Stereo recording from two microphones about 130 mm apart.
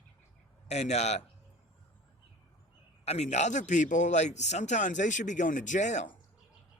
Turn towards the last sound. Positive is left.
turn(degrees=65)  # may be behind; listen again after turning